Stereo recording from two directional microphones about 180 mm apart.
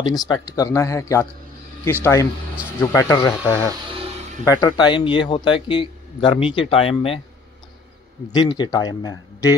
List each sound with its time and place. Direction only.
0.0 s speech: 20° left (ahead or behind)
2.8 s a man's voice: 15° left (ahead or behind); by 7.2 s 30° left (ahead or behind)
8.3 s a man's voice: 25° left (ahead or behind)